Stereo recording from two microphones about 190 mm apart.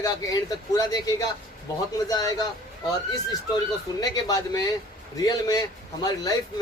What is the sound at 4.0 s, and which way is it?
Speech, 20° left (ahead or behind).